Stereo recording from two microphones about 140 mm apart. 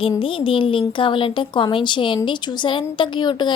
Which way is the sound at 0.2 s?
40° left (ahead or behind).